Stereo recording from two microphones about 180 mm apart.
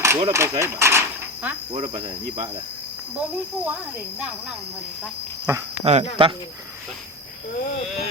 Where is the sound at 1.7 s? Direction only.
35° right (ahead or behind).